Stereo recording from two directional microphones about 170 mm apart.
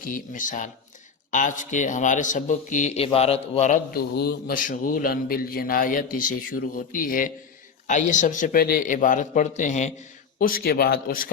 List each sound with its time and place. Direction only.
0.0 s speech: 50° left (ahead or behind)
3.9 s speech: 70° left (ahead or behind); by 9.9 s 45° left (ahead or behind)
10.3 s speech: 60° left (ahead or behind)